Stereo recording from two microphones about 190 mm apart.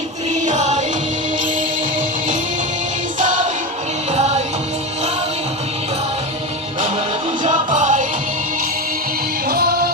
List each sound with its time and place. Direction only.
0.4 s music: 40° right (ahead or behind)
3.2 s music: 40° right (ahead or behind)
7.4 s music: 40° right (ahead or behind)
9.5 s music: 55° right (ahead or behind)